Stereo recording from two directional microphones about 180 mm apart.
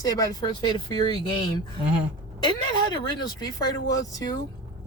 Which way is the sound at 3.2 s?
20° left (ahead or behind).